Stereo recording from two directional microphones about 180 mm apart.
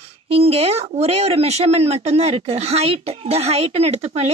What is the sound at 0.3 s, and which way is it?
Speech, 35° right (ahead or behind).